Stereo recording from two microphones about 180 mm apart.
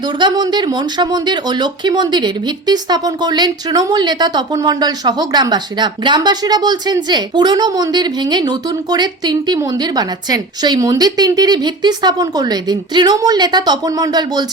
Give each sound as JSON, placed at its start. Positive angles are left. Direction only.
{"t": 0.2, "sound": "speech", "side_deg": -25}